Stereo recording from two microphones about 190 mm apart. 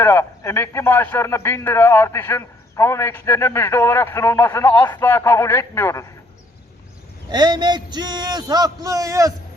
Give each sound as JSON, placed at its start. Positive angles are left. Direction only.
{"t": 0.0, "sound": "a man's voice", "side_deg": 15}
{"t": 7.3, "sound": "a man's voice", "side_deg": -20}